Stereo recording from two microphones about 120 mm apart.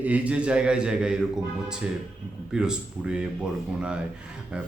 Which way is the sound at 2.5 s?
5° right (ahead or behind).